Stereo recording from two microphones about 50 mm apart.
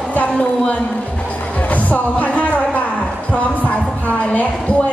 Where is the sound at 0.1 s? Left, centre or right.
Left.